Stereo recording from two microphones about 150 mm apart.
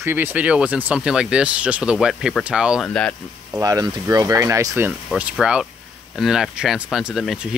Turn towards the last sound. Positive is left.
turn(degrees=0)  # may be behind; listen again after turning